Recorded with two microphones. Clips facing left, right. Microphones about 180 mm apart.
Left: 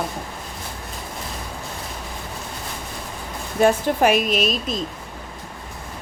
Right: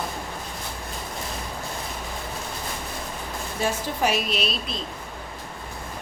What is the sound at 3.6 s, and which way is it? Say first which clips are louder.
A woman's voice: left 9 dB; 60° left (ahead or behind).